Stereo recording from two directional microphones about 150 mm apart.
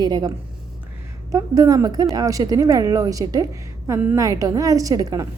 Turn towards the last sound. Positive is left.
turn(degrees=-25)  # may be behind; listen again after turning